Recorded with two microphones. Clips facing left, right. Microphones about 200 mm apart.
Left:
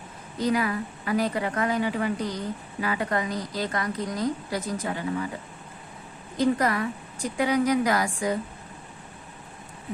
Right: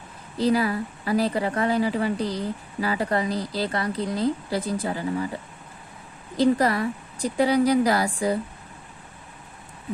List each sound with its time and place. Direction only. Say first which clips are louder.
0.3 s a woman's voice: right 3 dB; 30° right (ahead or behind)
6.3 s a woman's voice: right 3 dB; 35° right (ahead or behind)